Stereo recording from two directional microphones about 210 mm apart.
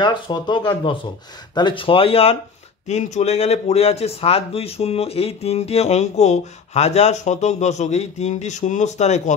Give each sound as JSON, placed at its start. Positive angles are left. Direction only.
{"t": 0.0, "sound": "speech", "side_deg": 20}